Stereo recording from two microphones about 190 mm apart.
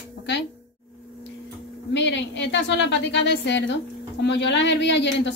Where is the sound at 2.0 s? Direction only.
70° left (ahead or behind).